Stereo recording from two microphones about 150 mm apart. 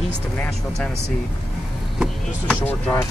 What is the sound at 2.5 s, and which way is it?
Speech, 10° left (ahead or behind).